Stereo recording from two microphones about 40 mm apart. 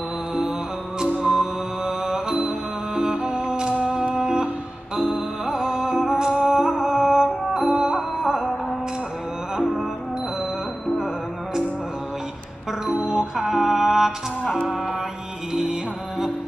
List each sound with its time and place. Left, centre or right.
1.2 s music: centre
12.8 s music: right
13.4 s music: centre